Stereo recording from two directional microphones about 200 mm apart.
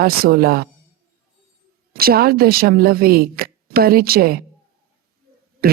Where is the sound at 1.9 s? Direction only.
50° right (ahead or behind).